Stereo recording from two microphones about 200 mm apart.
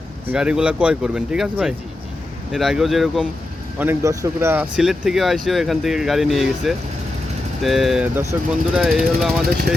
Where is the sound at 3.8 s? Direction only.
15° right (ahead or behind).